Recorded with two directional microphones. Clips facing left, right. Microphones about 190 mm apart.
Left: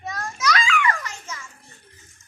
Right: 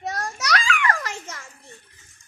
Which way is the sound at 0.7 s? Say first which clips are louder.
Even; 70° right (ahead or behind).